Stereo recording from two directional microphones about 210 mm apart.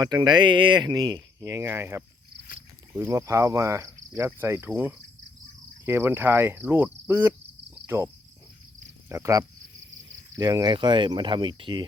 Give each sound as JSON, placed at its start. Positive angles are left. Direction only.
{"t": 0.0, "sound": "speech", "side_deg": -20}
{"t": 9.0, "sound": "speech", "side_deg": -15}